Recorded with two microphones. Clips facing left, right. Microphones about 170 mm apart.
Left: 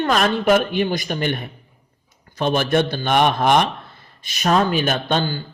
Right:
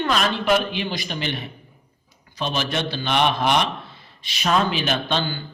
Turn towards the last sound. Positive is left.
turn(degrees=45)  # may be behind; listen again after turning